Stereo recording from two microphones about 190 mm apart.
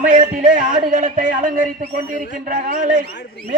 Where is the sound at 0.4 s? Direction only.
45° right (ahead or behind).